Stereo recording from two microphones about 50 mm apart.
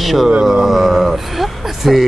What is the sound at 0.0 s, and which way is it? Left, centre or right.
Speech, centre.